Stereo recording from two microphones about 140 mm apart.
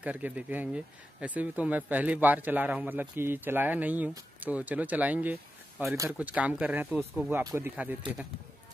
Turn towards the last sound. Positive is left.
turn(degrees=-10)  # may be behind; listen again after turning